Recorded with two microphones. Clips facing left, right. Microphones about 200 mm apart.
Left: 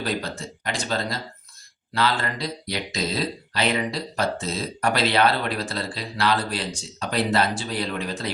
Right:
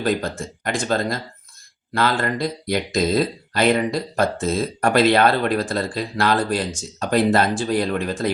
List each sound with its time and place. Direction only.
0.0 s speech: 50° right (ahead or behind)